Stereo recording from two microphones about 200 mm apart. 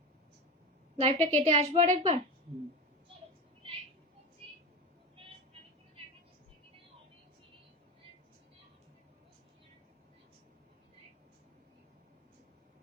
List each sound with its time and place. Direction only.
0.9 s a woman's voice: 30° right (ahead or behind)